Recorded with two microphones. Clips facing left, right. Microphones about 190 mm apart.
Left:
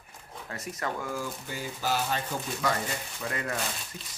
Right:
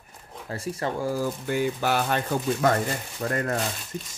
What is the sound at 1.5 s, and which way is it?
Speech, 60° right (ahead or behind).